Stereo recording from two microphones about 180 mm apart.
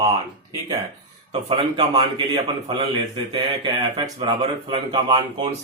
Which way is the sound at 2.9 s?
25° right (ahead or behind).